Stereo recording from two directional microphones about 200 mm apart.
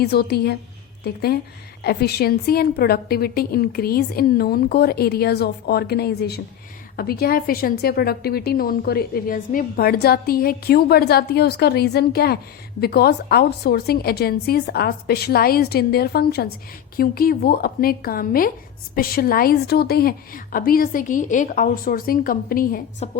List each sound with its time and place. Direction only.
0.0 s a woman's voice: 55° left (ahead or behind)